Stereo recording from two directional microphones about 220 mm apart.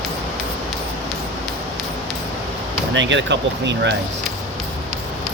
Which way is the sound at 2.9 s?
55° right (ahead or behind).